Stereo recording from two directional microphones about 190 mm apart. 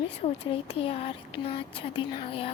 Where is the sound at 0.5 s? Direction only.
30° left (ahead or behind).